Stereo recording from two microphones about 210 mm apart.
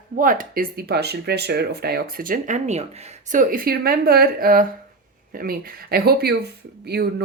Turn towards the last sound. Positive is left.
turn(degrees=-50)  # may be behind; listen again after turning